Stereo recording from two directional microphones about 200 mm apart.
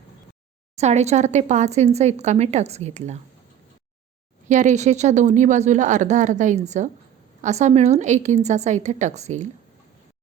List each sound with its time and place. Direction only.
0.8 s a woman's voice: 35° right (ahead or behind)
4.4 s a woman's voice: 40° right (ahead or behind)